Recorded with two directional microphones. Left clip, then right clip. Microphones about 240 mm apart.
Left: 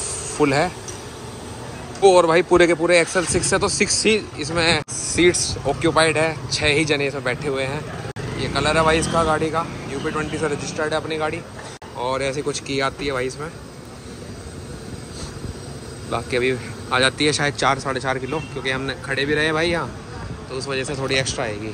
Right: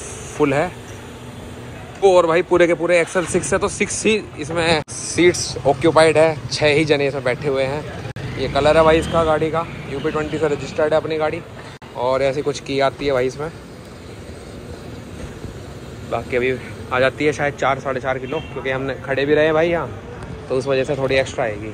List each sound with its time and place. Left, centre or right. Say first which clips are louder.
0.4 s speech: right 1 dB; centre
2.0 s speech: even; centre
8.5 s a man's voice: right 5 dB; centre
11.1 s speech: right 3 dB; centre
16.1 s speech: right 1 dB; centre